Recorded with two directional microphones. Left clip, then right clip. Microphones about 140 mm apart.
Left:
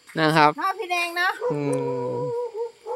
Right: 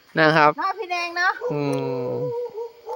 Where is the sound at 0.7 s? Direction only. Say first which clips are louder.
Left 1 dB; 75° left (ahead or behind).